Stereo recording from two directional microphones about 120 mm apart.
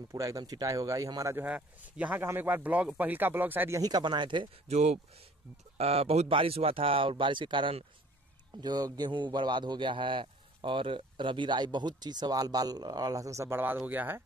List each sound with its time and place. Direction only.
0.1 s speech: 25° right (ahead or behind)
3.8 s a man's voice: 35° right (ahead or behind)
4.6 s a man's voice: 65° right (ahead or behind); by 14.2 s 15° right (ahead or behind)